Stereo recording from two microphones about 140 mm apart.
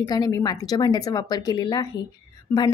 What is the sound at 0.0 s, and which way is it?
A woman's voice, 30° left (ahead or behind).